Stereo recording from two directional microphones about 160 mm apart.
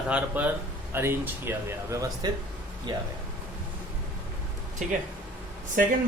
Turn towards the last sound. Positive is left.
turn(degrees=-65)  # may be behind; listen again after turning